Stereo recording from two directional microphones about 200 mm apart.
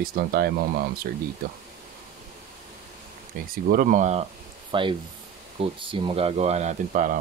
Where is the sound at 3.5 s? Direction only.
45° right (ahead or behind).